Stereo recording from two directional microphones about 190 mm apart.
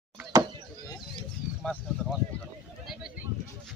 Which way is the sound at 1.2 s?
5° left (ahead or behind).